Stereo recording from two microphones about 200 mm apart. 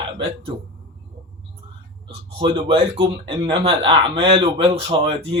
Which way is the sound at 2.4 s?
25° right (ahead or behind).